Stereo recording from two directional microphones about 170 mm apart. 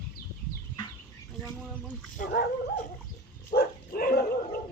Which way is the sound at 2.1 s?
55° left (ahead or behind).